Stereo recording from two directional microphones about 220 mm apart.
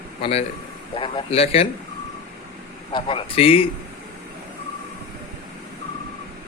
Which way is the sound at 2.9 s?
25° left (ahead or behind).